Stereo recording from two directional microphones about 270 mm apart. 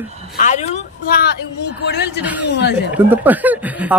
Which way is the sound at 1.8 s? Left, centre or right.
Left.